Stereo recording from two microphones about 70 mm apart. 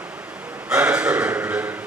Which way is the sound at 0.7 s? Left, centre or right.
Centre.